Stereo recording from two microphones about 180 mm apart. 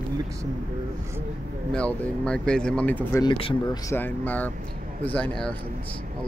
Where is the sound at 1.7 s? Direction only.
5° left (ahead or behind).